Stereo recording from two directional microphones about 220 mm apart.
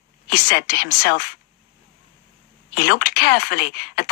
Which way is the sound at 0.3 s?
45° left (ahead or behind).